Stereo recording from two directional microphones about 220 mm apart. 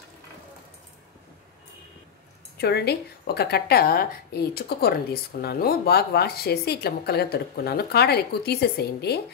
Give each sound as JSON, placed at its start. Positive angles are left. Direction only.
{"t": 2.5, "sound": "a woman's voice", "side_deg": 45}